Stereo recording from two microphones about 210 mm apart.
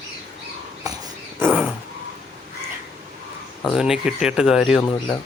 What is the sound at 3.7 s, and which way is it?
Speech, 5° right (ahead or behind).